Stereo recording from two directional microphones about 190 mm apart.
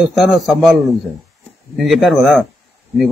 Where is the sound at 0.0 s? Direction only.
Centre (ahead or behind).